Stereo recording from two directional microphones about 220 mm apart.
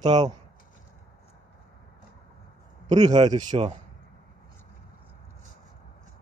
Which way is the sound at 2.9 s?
20° right (ahead or behind).